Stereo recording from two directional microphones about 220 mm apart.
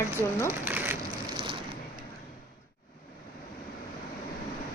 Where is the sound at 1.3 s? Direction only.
25° right (ahead or behind).